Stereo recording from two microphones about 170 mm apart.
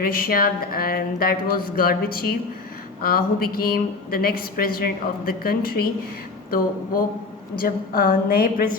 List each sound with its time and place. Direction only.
0.0 s a woman's voice: 60° left (ahead or behind)
7.6 s a woman's voice: 60° left (ahead or behind)